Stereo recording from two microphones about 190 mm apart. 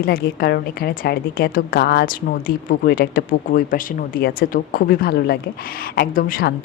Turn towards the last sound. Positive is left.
turn(degrees=50)  # may be behind; listen again after turning